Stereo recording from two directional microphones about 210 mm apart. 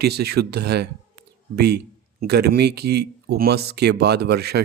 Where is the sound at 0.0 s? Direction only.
50° right (ahead or behind).